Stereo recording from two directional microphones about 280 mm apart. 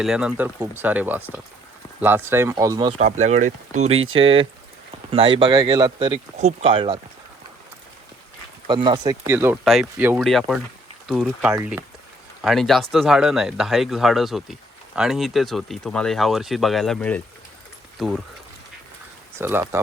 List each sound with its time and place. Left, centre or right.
0.0 s speech: centre
8.6 s speech: centre
19.4 s speech: centre